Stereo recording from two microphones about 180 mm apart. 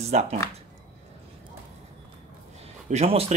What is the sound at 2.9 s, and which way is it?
Speech, 35° right (ahead or behind).